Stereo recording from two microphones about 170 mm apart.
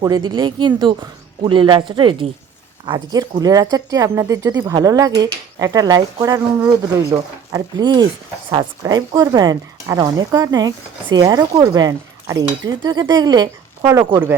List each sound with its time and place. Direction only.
0.0 s a woman's voice: 25° right (ahead or behind)